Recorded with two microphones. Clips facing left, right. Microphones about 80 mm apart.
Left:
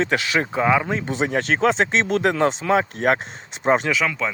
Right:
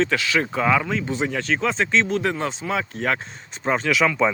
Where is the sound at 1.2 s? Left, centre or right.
Left.